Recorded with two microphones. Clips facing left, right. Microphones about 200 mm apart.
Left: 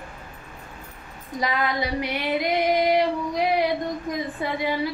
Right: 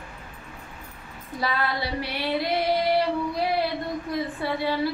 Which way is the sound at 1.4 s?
15° left (ahead or behind).